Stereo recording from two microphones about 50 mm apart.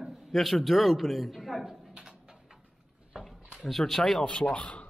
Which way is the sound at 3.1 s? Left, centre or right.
Centre.